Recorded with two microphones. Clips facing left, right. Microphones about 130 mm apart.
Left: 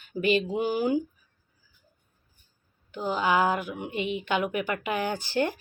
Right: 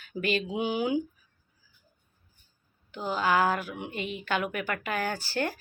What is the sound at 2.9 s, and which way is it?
A woman's voice, 15° left (ahead or behind).